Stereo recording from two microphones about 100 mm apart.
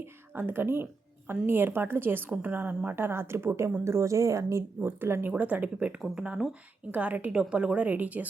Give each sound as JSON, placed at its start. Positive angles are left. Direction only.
{"t": 0.0, "sound": "a woman's voice", "side_deg": -20}